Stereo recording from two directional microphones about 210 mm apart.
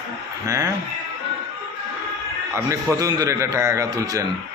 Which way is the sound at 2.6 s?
15° right (ahead or behind).